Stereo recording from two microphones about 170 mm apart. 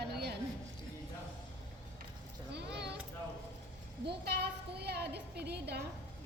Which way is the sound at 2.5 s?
80° right.